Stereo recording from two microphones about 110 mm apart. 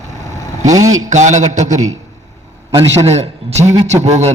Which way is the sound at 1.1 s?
90° right.